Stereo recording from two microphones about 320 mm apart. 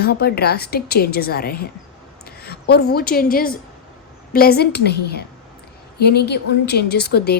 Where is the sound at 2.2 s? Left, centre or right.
Left.